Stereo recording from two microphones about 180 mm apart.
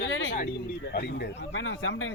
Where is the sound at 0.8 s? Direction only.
70° left (ahead or behind); by 2.1 s 90° left.